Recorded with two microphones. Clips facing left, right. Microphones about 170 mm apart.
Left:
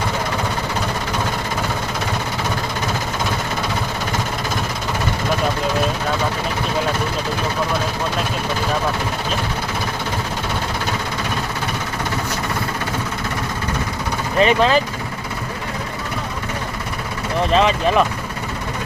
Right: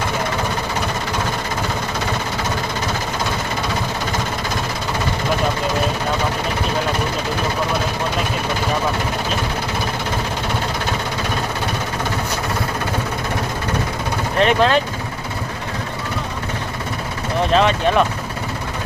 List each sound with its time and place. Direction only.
14.3 s speech: centre (ahead or behind)
17.5 s speech: centre (ahead or behind)